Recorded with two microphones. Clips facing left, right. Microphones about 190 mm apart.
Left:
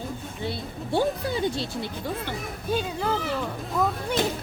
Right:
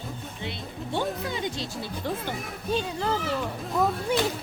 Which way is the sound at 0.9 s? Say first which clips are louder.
Left 5 dB; 35° left (ahead or behind).